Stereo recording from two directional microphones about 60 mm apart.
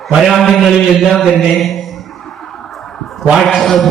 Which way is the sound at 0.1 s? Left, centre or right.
Centre.